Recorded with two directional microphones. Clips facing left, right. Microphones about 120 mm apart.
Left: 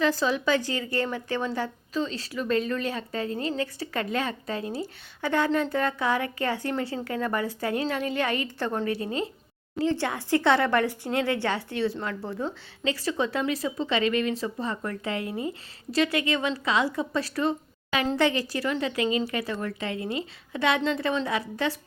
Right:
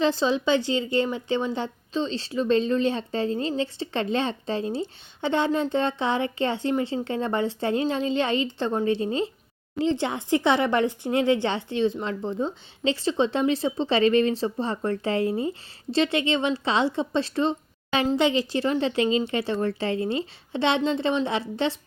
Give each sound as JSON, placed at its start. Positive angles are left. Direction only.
{"t": 0.0, "sound": "speech", "side_deg": -20}